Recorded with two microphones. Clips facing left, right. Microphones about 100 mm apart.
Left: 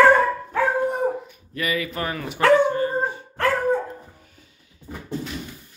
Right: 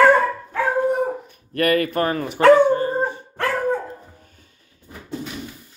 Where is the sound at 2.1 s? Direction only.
40° right (ahead or behind).